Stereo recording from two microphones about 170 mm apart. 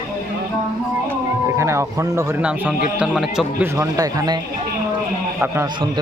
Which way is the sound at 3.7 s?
20° right (ahead or behind).